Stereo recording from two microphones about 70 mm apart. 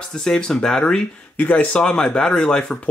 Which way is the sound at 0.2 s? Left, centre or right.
Centre.